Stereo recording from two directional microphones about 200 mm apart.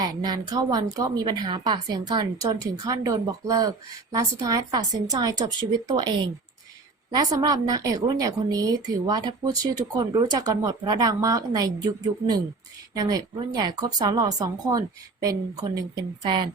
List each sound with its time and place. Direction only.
0.0 s a woman's voice: 20° right (ahead or behind)